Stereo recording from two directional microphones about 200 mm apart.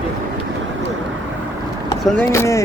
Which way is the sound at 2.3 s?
15° left (ahead or behind).